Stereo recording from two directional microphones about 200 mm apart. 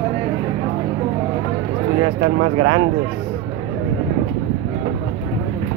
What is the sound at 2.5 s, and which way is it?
Speech, 25° right (ahead or behind).